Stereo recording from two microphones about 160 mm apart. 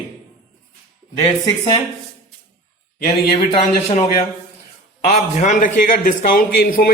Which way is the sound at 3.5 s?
40° left (ahead or behind).